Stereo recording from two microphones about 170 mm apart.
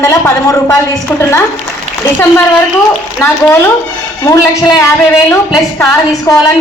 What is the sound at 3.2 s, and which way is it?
A woman's voice, 15° left (ahead or behind).